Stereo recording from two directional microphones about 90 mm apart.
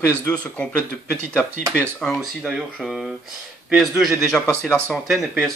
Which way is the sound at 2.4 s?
10° right (ahead or behind).